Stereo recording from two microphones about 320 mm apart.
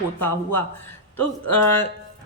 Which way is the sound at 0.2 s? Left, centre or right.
Centre.